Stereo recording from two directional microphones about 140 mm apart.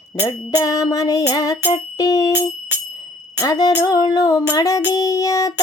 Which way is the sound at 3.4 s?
25° left (ahead or behind).